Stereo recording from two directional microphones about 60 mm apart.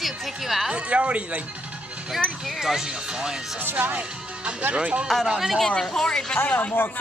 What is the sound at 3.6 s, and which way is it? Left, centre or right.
Speech, right.